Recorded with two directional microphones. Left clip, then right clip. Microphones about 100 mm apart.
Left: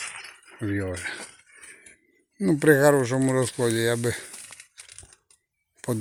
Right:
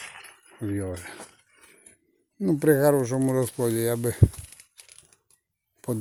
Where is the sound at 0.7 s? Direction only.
5° right (ahead or behind).